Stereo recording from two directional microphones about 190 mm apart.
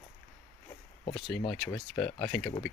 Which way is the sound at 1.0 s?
25° left (ahead or behind).